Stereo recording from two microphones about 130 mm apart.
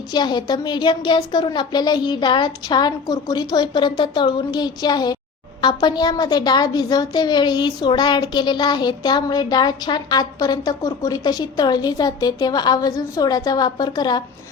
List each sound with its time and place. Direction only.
0.1 s a woman's voice: 35° left (ahead or behind)